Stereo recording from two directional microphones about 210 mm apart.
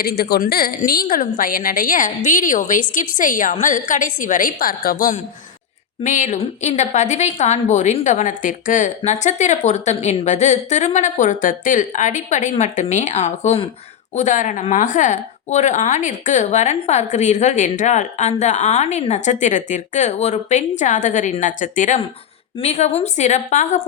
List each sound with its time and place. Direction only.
0.0 s a woman's voice: 50° left (ahead or behind)